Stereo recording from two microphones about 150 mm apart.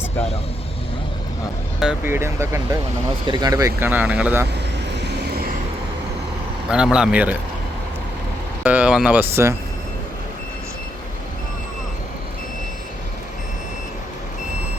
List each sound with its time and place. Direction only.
2.0 s speech: 15° right (ahead or behind)
3.2 s speech: 30° right (ahead or behind); by 4.4 s 10° right (ahead or behind)
5.1 s vehicle: 90° right
6.7 s speech: 5° right (ahead or behind)
8.6 s speech: 10° right (ahead or behind)